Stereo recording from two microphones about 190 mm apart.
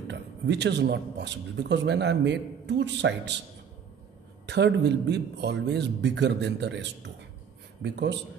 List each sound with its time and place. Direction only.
0.1 s a man's voice: 65° right (ahead or behind)
4.5 s a man's voice: 65° right (ahead or behind)